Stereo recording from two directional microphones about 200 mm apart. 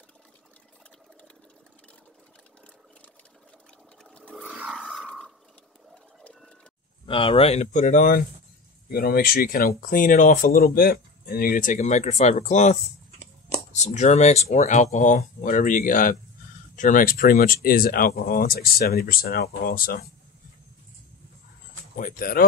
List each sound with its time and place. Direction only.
4.0 s a sound: 5° left (ahead or behind)
4.4 s wild animals: 5° right (ahead or behind)
7.1 s speech: 25° left (ahead or behind); by 20.1 s 50° left (ahead or behind)
21.9 s speech: 45° left (ahead or behind)